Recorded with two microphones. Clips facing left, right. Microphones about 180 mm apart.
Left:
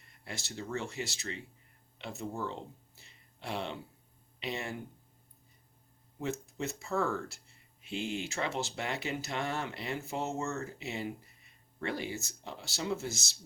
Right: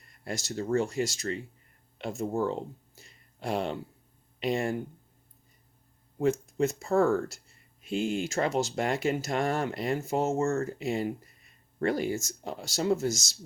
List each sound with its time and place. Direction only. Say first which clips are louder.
0.3 s speech: right 10 dB; 45° right (ahead or behind)
6.1 s speech: right 10 dB; 50° right (ahead or behind)